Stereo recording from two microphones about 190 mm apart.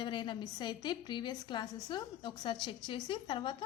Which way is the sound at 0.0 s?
25° left (ahead or behind).